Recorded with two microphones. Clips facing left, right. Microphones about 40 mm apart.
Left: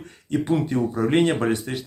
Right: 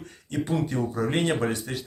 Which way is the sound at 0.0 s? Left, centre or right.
Left.